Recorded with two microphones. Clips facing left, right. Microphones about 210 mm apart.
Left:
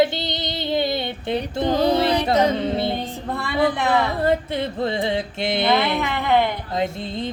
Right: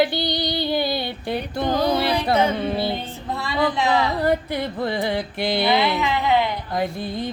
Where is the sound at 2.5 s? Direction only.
25° left (ahead or behind).